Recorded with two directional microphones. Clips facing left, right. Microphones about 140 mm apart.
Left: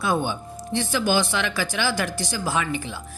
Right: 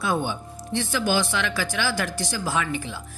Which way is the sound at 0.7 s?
15° left (ahead or behind).